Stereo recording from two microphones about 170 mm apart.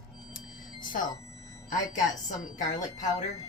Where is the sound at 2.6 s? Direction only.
45° left (ahead or behind).